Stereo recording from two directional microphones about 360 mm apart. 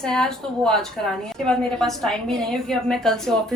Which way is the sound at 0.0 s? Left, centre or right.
Centre.